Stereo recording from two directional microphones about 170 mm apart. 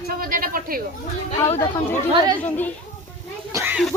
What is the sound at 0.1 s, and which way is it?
Speech, 55° right (ahead or behind).